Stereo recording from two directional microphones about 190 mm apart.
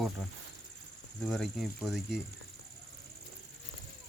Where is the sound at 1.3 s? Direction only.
Centre (ahead or behind).